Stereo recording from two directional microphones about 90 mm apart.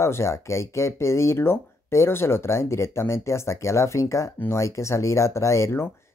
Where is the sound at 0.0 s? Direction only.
30° left (ahead or behind).